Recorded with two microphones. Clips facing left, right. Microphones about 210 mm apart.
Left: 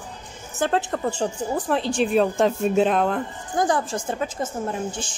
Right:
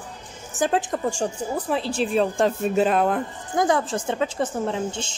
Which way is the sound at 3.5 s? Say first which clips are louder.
Right 1 dB; 25° right (ahead or behind).